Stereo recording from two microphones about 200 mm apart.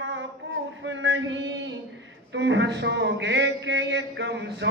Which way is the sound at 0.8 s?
65° right (ahead or behind).